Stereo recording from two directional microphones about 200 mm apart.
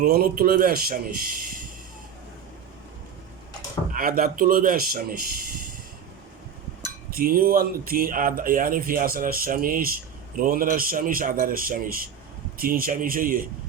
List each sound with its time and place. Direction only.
0.0 s speech: 50° right (ahead or behind)
3.9 s speech: 45° right (ahead or behind)
7.1 s speech: 45° right (ahead or behind)